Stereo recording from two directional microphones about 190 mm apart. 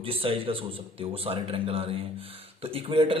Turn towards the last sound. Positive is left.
turn(degrees=-30)  # may be behind; listen again after turning